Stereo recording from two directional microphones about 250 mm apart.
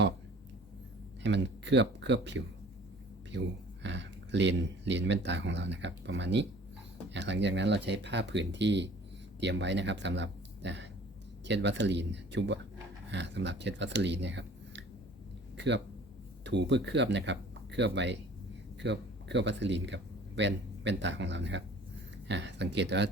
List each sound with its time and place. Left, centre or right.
1.2 s speech: right
3.8 s speech: right